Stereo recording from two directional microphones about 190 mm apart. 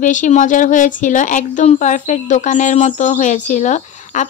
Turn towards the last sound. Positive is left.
turn(degrees=40)  # may be behind; listen again after turning